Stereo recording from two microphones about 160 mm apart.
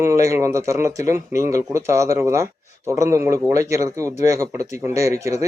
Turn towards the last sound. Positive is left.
turn(degrees=-20)  # may be behind; listen again after turning